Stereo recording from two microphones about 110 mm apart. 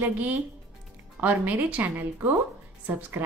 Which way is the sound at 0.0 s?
15° right (ahead or behind).